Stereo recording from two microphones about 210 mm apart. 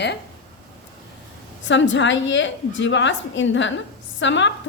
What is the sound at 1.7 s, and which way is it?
A woman's voice, 60° left (ahead or behind).